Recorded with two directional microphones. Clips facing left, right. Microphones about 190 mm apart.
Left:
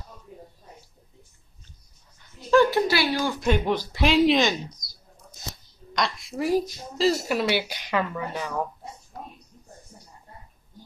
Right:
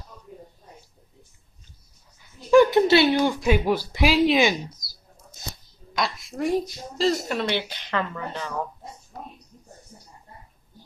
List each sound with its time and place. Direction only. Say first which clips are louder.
2.5 s speech: right 4 dB; 20° right (ahead or behind)
3.3 s speech: right 2 dB; 5° right (ahead or behind)
5.9 s speech: even; centre (ahead or behind)